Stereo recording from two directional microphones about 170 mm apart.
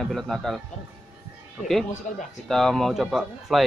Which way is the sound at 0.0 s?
Centre (ahead or behind).